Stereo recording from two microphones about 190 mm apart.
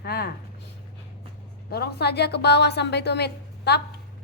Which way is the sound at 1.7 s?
55° left (ahead or behind).